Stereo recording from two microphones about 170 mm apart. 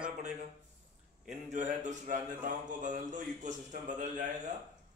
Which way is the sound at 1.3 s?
45° right (ahead or behind).